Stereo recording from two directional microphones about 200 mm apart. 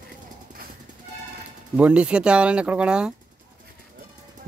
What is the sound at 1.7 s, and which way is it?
Speech, 5° right (ahead or behind).